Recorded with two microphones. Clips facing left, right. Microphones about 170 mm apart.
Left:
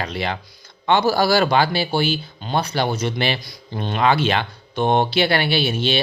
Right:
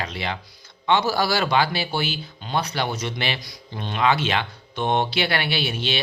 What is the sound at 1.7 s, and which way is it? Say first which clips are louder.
Speech: left 6 dB; 30° left (ahead or behind).